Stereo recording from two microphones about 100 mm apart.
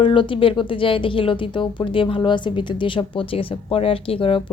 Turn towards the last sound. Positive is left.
turn(degrees=65)  # may be behind; listen again after turning